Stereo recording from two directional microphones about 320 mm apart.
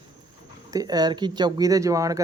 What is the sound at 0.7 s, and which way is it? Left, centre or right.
Speech, centre.